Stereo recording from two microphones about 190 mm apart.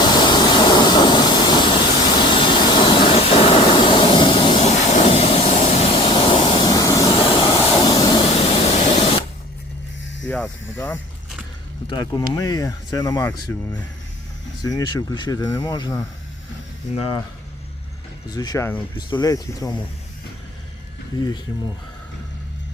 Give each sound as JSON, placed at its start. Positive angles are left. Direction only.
{"t": 0.0, "sound": "steam", "side_deg": 20}
{"t": 7.9, "sound": "spray", "side_deg": 20}
{"t": 10.2, "sound": "snake", "side_deg": 10}
{"t": 11.9, "sound": "speech", "side_deg": 25}
{"t": 18.3, "sound": "speech", "side_deg": 20}